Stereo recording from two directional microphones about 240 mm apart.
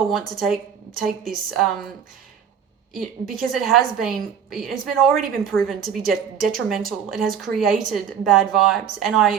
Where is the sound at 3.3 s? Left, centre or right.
Centre.